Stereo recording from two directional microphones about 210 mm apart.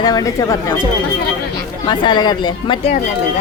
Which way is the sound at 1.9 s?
20° left (ahead or behind).